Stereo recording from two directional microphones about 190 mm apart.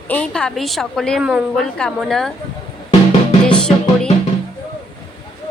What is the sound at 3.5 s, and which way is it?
Music, 5° left (ahead or behind).